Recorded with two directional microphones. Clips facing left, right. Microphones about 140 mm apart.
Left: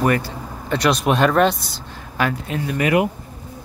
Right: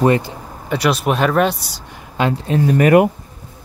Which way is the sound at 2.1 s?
25° right (ahead or behind).